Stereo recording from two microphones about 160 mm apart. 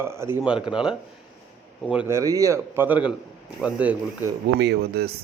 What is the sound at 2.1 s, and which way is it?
Speech, 20° right (ahead or behind).